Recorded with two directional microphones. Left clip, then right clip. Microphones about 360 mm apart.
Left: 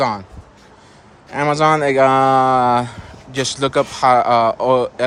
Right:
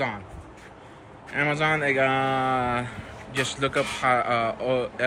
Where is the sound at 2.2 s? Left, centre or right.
Left.